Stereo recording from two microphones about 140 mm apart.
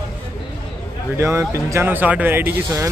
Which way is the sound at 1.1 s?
20° right (ahead or behind).